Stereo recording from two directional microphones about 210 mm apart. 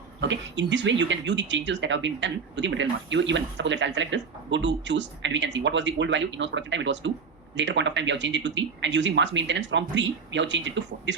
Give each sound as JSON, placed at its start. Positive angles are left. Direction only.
{"t": 0.2, "sound": "speech", "side_deg": -60}